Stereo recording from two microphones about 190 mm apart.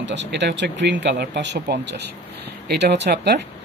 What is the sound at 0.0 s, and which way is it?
Speech, 70° right (ahead or behind).